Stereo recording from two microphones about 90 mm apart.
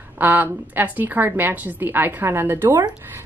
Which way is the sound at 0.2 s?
20° right (ahead or behind).